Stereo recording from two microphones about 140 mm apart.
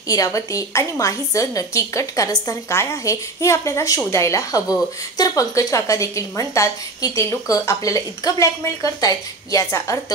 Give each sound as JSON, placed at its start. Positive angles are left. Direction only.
{"t": 0.1, "sound": "a woman's voice", "side_deg": 25}